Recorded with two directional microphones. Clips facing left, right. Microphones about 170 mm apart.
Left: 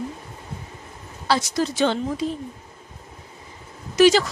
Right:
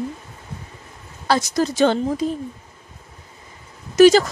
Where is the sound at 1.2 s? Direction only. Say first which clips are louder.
Right 3 dB; 45° right (ahead or behind).